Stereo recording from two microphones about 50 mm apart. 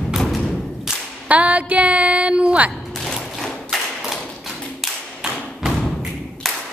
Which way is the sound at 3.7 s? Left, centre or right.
Centre.